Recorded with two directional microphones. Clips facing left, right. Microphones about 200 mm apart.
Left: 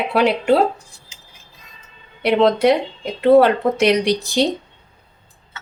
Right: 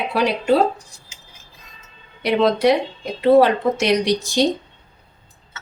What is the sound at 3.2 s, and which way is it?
Speech, 55° left (ahead or behind).